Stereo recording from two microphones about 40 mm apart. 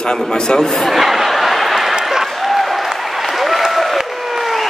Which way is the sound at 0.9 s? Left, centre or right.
Centre.